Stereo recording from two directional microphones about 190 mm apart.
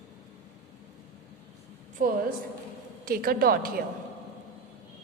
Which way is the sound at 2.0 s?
45° right (ahead or behind).